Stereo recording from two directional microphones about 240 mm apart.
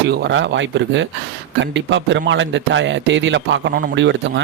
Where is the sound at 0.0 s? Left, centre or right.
Right.